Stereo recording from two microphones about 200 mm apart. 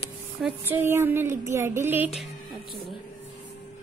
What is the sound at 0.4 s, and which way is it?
Speech, 5° right (ahead or behind).